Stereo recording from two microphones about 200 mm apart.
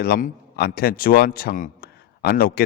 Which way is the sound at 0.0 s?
50° left (ahead or behind).